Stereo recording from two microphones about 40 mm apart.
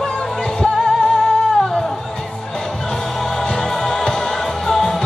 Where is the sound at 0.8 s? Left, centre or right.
Left.